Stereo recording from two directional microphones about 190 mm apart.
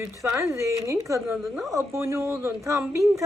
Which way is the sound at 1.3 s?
Centre (ahead or behind).